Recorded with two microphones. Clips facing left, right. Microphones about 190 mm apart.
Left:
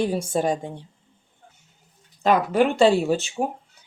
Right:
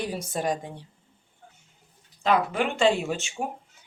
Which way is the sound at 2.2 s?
40° left (ahead or behind).